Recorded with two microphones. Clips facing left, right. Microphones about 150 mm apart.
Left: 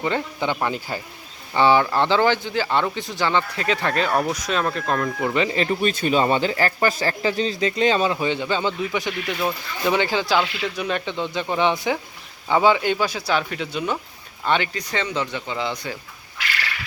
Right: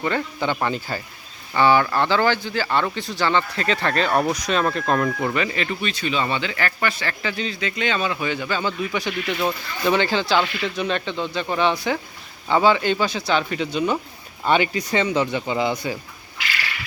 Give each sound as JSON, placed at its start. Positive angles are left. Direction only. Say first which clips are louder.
{"t": 0.0, "sound": "speech", "louder": "even", "side_deg": 15}
{"t": 1.5, "sound": "speech", "louder": "even", "side_deg": 20}
{"t": 5.3, "sound": "speech", "louder": "left 3 dB", "side_deg": 25}
{"t": 5.9, "sound": "a man's voice", "louder": "left 4 dB", "side_deg": 45}
{"t": 14.4, "sound": "speech", "louder": "right 3 dB", "side_deg": -10}